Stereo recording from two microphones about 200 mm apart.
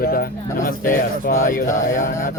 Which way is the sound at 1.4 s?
40° left (ahead or behind).